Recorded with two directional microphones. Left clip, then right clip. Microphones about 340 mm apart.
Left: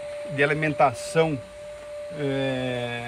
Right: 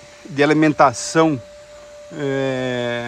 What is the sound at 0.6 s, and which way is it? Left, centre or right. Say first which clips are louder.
Mantra: right 9 dB; right.